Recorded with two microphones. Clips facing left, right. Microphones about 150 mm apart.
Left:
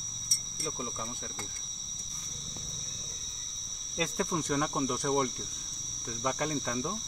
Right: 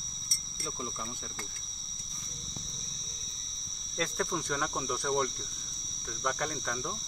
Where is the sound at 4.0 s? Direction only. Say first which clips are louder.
Left 1 dB; 10° left (ahead or behind).